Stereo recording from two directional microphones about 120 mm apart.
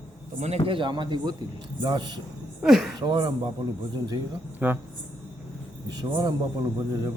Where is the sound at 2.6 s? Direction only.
5° right (ahead or behind).